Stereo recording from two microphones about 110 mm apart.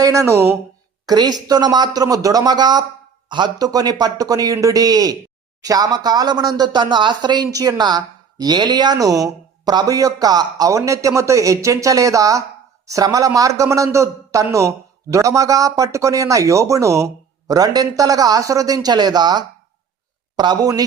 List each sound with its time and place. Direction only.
0.0 s speech: 30° right (ahead or behind)
1.0 s speech: 40° right (ahead or behind)